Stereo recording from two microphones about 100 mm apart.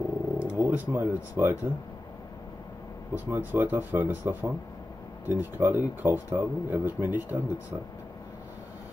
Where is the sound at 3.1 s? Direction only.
20° right (ahead or behind).